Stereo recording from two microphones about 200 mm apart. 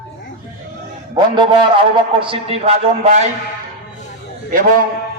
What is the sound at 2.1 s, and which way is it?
A man's voice, 25° right (ahead or behind).